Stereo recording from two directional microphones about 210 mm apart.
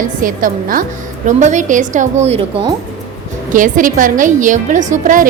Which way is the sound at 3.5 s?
40° right (ahead or behind).